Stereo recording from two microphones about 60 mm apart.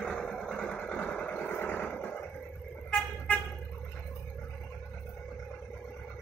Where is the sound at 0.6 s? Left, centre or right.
Left.